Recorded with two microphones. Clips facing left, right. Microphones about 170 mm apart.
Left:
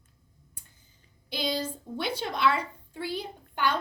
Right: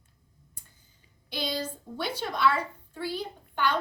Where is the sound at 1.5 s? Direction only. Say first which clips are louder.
Left 2 dB; 10° left (ahead or behind).